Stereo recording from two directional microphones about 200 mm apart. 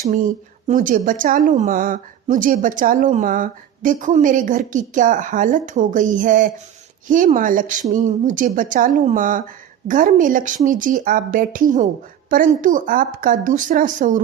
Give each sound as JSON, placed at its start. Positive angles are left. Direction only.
{"t": 0.0, "sound": "speech", "side_deg": -40}